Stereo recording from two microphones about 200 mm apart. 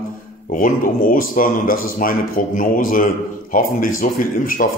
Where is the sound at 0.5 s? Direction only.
40° left (ahead or behind).